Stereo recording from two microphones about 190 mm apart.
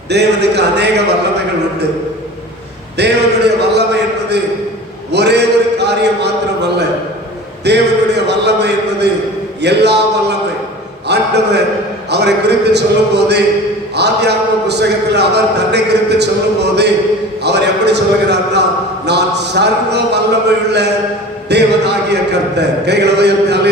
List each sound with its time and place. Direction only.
0.1 s a man's voice: 60° right (ahead or behind)
3.0 s a man's voice: 60° right (ahead or behind)
5.1 s a sound: 65° right (ahead or behind)
9.6 s a man's voice: 65° right (ahead or behind)